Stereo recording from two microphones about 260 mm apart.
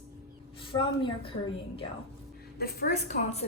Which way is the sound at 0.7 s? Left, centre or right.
Centre.